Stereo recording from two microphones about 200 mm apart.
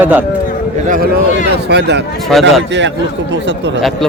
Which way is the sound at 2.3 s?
Centre (ahead or behind).